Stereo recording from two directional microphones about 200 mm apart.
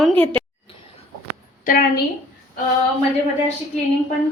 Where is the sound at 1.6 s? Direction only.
45° left (ahead or behind).